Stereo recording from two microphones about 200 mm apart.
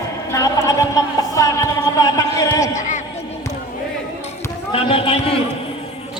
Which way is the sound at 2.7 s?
40° left (ahead or behind).